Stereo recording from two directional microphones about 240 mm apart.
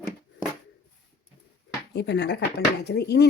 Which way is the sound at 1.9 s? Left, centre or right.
Left.